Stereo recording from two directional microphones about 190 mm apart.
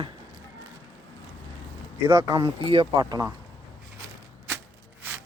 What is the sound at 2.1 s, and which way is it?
Speech, 20° right (ahead or behind).